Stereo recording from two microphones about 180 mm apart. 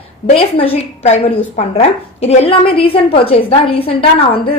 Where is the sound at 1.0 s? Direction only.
35° left (ahead or behind).